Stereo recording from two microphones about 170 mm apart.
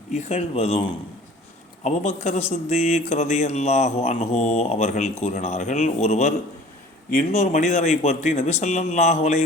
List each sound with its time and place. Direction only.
0.1 s a man's voice: 40° left (ahead or behind)
7.3 s a man's voice: 40° left (ahead or behind)